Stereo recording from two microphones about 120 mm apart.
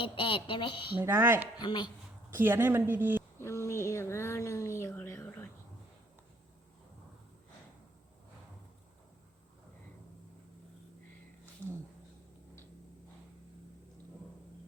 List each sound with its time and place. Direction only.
0.0 s speech: 45° left (ahead or behind)
0.9 s speech: 20° right (ahead or behind)
1.5 s speech: 40° left (ahead or behind)
2.3 s speech: 20° right (ahead or behind)
3.3 s speech: 20° left (ahead or behind)